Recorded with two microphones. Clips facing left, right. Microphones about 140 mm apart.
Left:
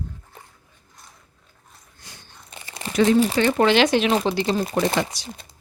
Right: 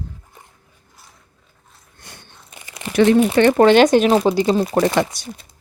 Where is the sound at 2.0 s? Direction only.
60° right (ahead or behind).